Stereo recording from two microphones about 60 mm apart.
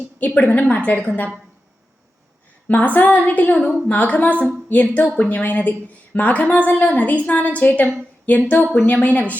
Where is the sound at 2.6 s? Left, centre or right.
Left.